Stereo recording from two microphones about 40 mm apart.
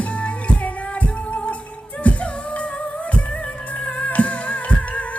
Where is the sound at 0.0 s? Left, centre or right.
Left.